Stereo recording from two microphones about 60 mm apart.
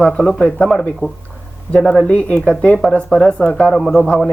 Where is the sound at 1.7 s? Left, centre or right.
Centre.